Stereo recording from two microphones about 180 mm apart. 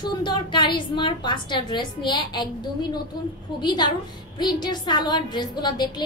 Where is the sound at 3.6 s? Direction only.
25° left (ahead or behind).